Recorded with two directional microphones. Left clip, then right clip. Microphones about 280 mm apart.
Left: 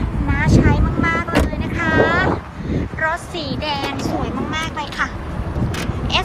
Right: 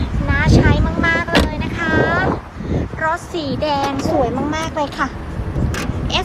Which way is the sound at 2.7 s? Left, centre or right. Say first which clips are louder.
Right 1 dB; centre.